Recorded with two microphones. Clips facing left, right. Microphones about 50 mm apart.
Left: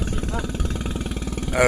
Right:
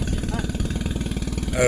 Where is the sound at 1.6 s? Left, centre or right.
Left.